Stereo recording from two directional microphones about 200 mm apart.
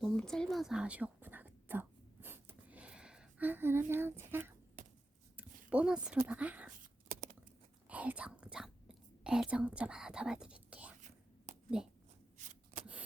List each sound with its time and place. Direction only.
0.0 s whispering: 5° left (ahead or behind)
5.4 s a sound: 5° right (ahead or behind)
6.2 s speech: 5° right (ahead or behind)
7.1 s a sound: 40° right (ahead or behind)
7.9 s whispering: 5° right (ahead or behind)
11.8 s speech: 5° right (ahead or behind)
12.7 s shuffling cards: 35° right (ahead or behind)